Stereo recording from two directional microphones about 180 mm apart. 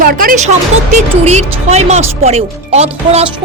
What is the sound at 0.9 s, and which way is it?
Speech, 40° right (ahead or behind).